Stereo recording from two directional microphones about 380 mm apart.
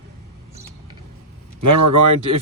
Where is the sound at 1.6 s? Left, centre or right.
Right.